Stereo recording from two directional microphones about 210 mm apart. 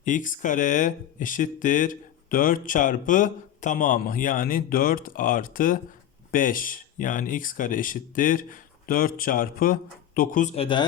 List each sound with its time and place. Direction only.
0.0 s speech: 40° left (ahead or behind)